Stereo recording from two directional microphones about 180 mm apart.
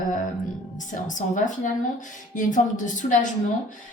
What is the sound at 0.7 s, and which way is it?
A woman's voice, 45° left (ahead or behind).